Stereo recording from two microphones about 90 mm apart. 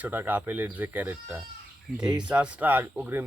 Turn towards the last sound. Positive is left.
turn(degrees=-20)  # may be behind; listen again after turning